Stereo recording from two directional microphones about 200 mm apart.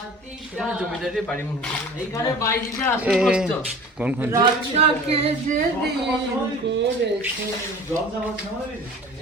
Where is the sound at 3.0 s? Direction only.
5° right (ahead or behind).